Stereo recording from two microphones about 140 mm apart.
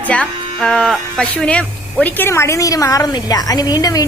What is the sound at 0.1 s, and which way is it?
Speech, 5° left (ahead or behind).